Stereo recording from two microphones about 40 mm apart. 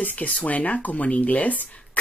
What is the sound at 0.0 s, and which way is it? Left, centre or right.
Speech, left.